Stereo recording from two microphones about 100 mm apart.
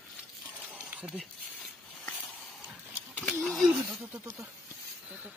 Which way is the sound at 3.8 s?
15° right (ahead or behind).